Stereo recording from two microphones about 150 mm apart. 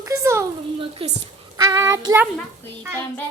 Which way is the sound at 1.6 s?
20° right (ahead or behind).